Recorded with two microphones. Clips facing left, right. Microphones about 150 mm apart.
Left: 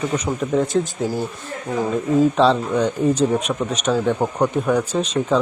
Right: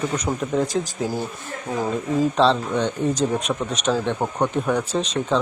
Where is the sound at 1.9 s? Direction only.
Centre (ahead or behind).